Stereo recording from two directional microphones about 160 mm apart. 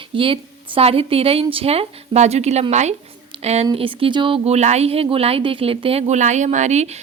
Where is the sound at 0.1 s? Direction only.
35° right (ahead or behind).